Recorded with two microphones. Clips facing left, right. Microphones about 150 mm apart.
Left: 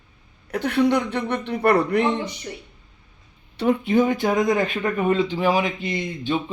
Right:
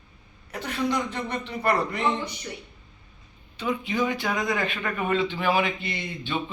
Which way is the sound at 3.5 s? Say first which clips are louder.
Left 8 dB; 60° left (ahead or behind).